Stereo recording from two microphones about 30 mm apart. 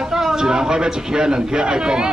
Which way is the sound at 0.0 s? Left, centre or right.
Centre.